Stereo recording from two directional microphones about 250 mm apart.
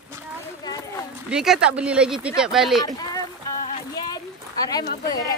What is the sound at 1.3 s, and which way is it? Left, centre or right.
Speech, centre.